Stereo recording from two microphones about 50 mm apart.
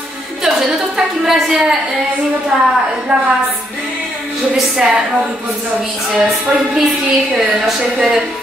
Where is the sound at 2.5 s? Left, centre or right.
Centre.